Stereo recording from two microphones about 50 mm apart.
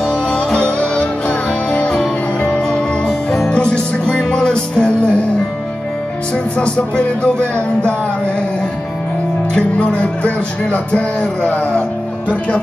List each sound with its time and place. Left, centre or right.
0.0 s music: centre
2.4 s music: left
3.1 s music: centre
6.6 s music: left
9.5 s music: centre